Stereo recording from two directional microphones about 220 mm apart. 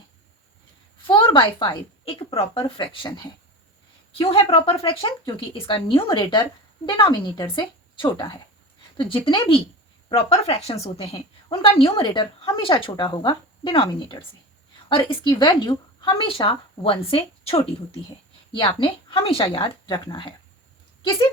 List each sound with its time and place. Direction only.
1.0 s a woman's voice: 20° left (ahead or behind)